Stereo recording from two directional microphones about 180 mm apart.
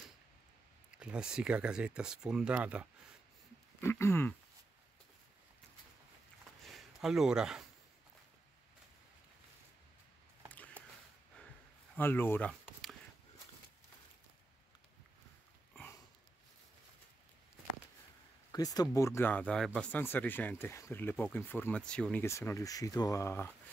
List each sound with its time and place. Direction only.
0.9 s speech: 5° right (ahead or behind)
3.8 s speech: 15° left (ahead or behind)
6.6 s a sound: centre (ahead or behind)
12.0 s speech: 10° left (ahead or behind)
18.5 s speech: 20° left (ahead or behind)